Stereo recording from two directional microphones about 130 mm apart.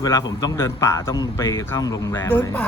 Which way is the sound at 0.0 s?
30° left (ahead or behind).